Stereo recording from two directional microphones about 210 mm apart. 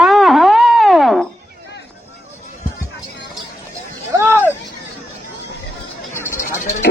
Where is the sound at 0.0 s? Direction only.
Centre (ahead or behind).